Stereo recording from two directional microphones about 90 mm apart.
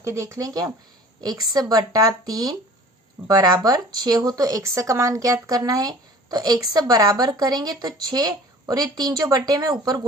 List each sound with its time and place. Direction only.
0.0 s speech: 35° right (ahead or behind)